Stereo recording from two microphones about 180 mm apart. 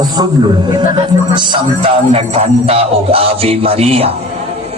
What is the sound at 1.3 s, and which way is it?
Music, 25° right (ahead or behind).